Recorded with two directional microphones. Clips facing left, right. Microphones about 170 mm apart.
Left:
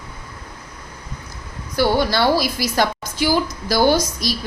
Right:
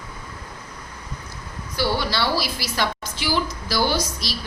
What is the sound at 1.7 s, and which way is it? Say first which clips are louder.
A woman's voice: left 6 dB; 50° left (ahead or behind).